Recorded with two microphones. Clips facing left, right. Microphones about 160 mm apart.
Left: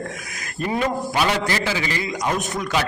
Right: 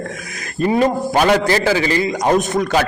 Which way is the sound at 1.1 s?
45° right (ahead or behind).